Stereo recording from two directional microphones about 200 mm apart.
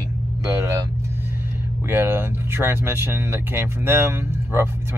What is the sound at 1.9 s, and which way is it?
Speech, 10° right (ahead or behind).